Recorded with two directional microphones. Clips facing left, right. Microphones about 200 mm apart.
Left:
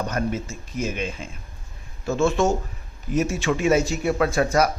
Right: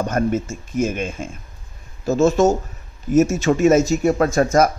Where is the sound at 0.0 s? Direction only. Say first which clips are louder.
Right 6 dB; 50° right (ahead or behind).